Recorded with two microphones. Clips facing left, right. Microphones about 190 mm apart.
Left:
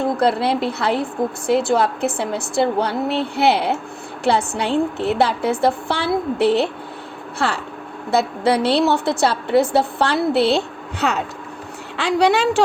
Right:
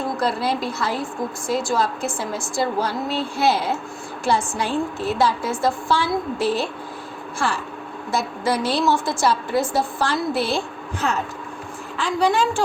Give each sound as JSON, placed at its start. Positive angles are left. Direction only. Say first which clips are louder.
{"t": 0.2, "sound": "a woman's voice", "louder": "left 5 dB", "side_deg": 60}